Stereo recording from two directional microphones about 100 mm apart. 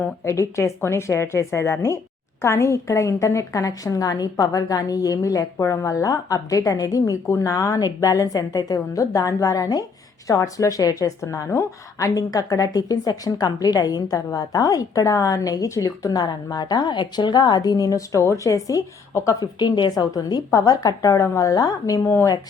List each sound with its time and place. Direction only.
0.3 s a woman's voice: 30° left (ahead or behind)
19.6 s a woman's voice: 50° left (ahead or behind)
22.0 s speech: 25° left (ahead or behind)